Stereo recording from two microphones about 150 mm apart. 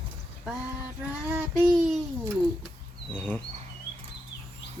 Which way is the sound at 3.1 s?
10° left (ahead or behind).